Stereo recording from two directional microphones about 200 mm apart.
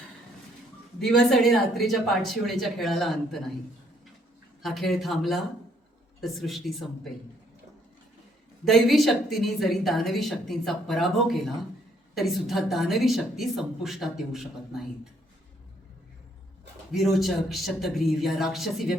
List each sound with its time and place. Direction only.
0.9 s a woman's voice: centre (ahead or behind)
4.6 s a woman's voice: centre (ahead or behind)
8.6 s a woman's voice: centre (ahead or behind)
16.9 s a woman's voice: centre (ahead or behind)